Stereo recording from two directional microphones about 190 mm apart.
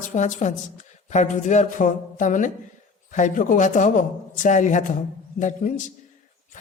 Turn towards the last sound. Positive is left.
turn(degrees=40)  # may be behind; listen again after turning